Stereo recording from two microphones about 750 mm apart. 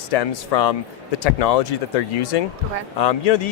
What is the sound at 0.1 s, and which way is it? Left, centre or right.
Speech, left.